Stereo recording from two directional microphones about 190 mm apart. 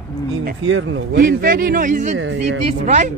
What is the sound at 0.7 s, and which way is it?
Speech, 85° right.